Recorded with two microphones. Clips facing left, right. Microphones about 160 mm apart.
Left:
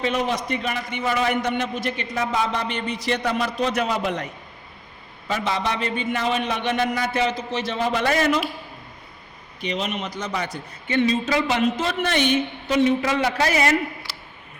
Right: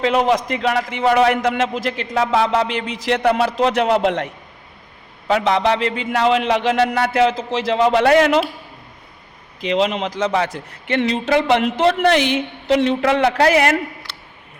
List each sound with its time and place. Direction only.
0.0 s a man's voice: 85° right; by 4.3 s 70° right (ahead or behind)
5.3 s a man's voice: 80° right
9.6 s a man's voice: 90° right; by 13.7 s 65° right (ahead or behind)